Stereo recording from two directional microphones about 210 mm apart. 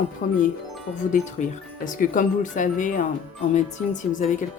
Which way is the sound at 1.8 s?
40° left (ahead or behind).